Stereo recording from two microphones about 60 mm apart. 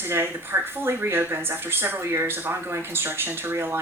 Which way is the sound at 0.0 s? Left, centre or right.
Right.